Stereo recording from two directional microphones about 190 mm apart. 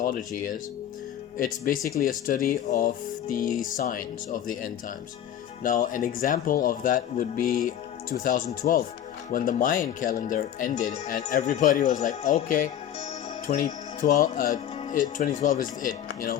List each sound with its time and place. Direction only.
0.0 s speech: 45° left (ahead or behind)
1.4 s speech: 45° left (ahead or behind)